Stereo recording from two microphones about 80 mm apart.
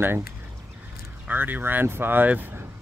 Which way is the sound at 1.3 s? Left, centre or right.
Right.